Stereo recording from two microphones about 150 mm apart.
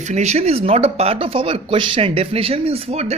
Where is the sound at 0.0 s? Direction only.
50° right (ahead or behind).